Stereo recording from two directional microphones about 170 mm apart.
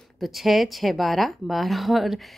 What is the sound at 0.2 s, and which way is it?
A woman's voice, centre (ahead or behind).